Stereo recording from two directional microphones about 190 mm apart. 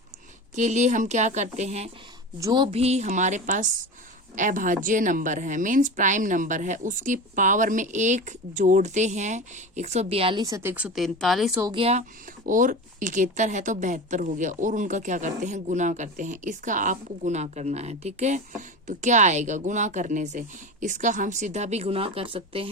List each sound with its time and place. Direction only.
0.5 s speech: 40° right (ahead or behind)
2.4 s speech: 25° right (ahead or behind); by 11.6 s centre (ahead or behind)
11.6 s speech: 25° right (ahead or behind)
12.5 s speech: 45° right (ahead or behind); by 22.7 s 30° right (ahead or behind)